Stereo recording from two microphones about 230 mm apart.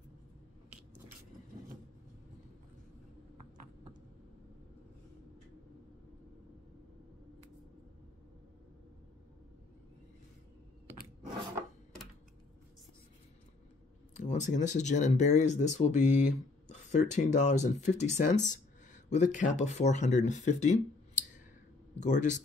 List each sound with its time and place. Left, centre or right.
14.1 s speech: left